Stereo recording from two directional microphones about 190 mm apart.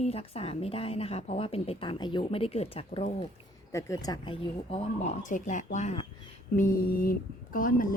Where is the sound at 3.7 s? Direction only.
15° left (ahead or behind).